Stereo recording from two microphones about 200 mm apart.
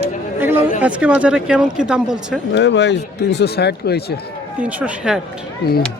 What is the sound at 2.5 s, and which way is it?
Speech, 60° left (ahead or behind).